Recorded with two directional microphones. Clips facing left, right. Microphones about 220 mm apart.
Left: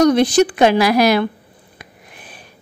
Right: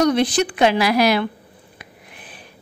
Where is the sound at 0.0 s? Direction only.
45° left (ahead or behind).